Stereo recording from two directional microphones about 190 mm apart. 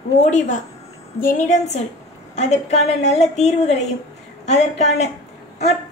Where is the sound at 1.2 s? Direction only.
40° left (ahead or behind).